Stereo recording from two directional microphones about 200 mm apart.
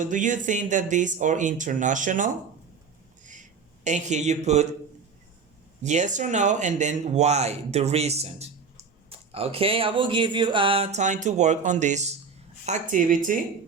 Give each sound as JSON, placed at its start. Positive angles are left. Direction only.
{"t": 0.0, "sound": "a man's voice", "side_deg": -40}
{"t": 3.8, "sound": "a man's voice", "side_deg": -35}
{"t": 5.8, "sound": "a man's voice", "side_deg": -35}